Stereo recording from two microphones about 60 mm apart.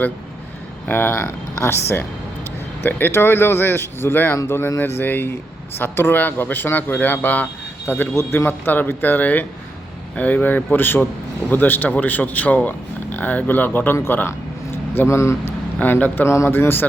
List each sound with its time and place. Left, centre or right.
0.9 s speech: left
13.9 s speech: left
15.8 s speech: left
16.2 s speech: left
16.5 s speech: left